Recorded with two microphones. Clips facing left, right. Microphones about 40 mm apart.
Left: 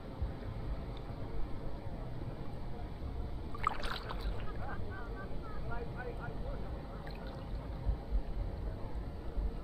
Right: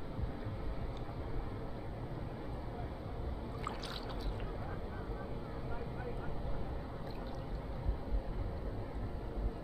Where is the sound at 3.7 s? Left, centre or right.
Left.